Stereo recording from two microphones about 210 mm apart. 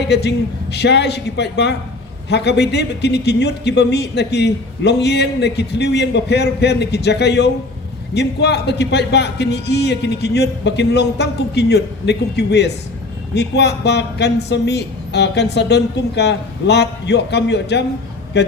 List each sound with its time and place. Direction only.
0.0 s a woman's voice: 55° left (ahead or behind)